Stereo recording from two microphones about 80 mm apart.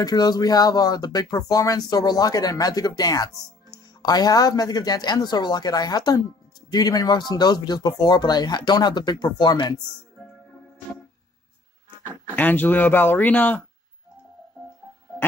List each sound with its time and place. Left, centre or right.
0.0 s speech: left
12.4 s speech: left